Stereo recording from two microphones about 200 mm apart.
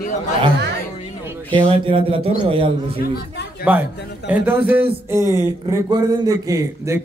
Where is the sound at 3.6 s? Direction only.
10° right (ahead or behind).